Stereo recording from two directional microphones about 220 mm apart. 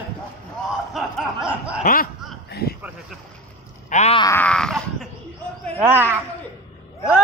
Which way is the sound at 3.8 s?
30° left (ahead or behind).